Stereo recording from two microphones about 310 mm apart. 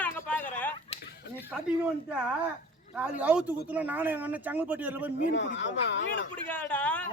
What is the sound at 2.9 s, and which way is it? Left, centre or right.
Speech, centre.